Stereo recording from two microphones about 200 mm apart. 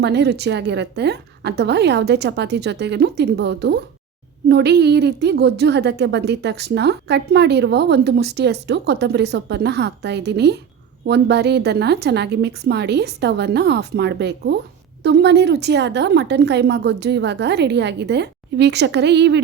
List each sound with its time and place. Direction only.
0.0 s a woman's voice: 55° right (ahead or behind)